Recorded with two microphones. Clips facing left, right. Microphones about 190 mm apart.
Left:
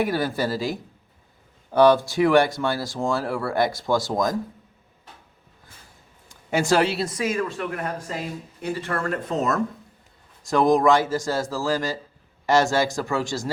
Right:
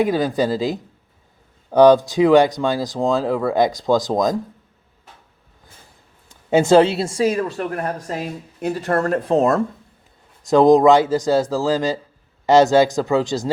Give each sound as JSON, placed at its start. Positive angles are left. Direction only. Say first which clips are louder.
{"t": 0.0, "sound": "speech", "louder": "right 5 dB", "side_deg": -20}
{"t": 6.5, "sound": "speech", "louder": "right 7 dB", "side_deg": -25}
{"t": 10.4, "sound": "speech", "louder": "right 7 dB", "side_deg": -20}